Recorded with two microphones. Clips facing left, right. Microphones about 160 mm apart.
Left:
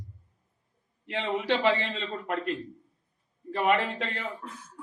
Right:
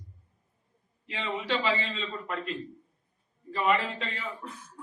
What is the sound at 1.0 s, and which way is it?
A man's voice, 65° left (ahead or behind).